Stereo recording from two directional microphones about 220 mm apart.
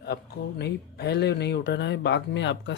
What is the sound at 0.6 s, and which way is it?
Speech, 50° left (ahead or behind).